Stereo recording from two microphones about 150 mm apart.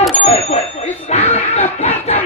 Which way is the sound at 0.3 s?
45° left (ahead or behind).